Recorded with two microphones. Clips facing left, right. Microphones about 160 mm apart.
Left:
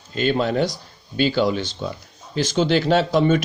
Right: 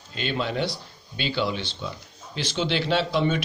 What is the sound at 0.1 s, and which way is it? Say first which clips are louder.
Speech: left 8 dB; 45° left (ahead or behind).